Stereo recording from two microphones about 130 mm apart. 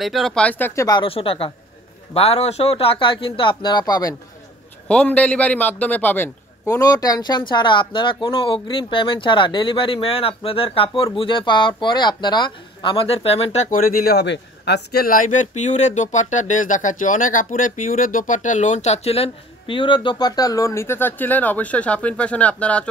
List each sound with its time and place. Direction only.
0.0 s speech: centre (ahead or behind)
1.0 s speech: 45° left (ahead or behind); by 4.1 s 30° left (ahead or behind)
4.8 s a man's voice: 10° left (ahead or behind); by 13.7 s 60° left (ahead or behind)
15.0 s speech: 85° left; by 22.8 s 10° left (ahead or behind)